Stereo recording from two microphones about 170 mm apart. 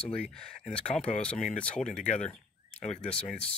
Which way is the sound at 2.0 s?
40° left (ahead or behind).